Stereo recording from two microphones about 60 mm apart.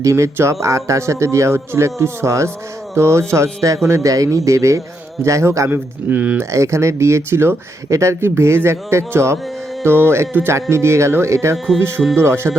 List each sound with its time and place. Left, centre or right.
0.0 s a man's voice: right
6.1 s speech: right
6.5 s speech: right
11.5 s speech: centre
11.8 s speech: right